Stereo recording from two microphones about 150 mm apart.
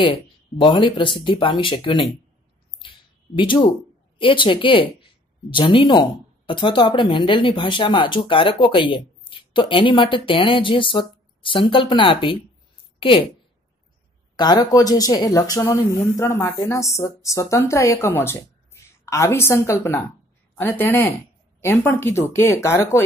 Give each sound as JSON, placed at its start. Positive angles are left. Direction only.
{"t": 0.0, "sound": "speech", "side_deg": 35}
{"t": 3.3, "sound": "speech", "side_deg": 35}
{"t": 14.3, "sound": "speech", "side_deg": 25}